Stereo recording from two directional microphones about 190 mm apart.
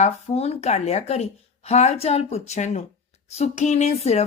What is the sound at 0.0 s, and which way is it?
Speech, 30° left (ahead or behind).